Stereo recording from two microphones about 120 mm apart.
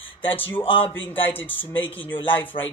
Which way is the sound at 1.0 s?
15° left (ahead or behind).